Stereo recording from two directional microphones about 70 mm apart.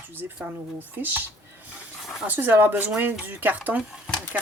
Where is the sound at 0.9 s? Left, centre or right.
Right.